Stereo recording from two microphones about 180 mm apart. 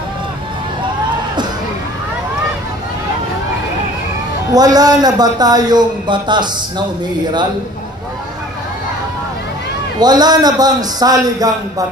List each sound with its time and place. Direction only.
4.6 s a man's voice: 20° right (ahead or behind)
9.9 s a man's voice: 20° right (ahead or behind)